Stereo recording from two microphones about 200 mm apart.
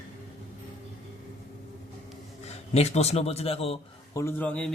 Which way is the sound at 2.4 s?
30° left (ahead or behind).